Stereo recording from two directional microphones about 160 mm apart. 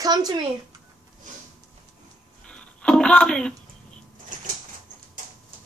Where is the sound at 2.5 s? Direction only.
5° left (ahead or behind).